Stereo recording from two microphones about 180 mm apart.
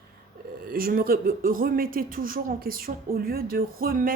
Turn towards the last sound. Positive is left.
turn(degrees=-55)  # may be behind; listen again after turning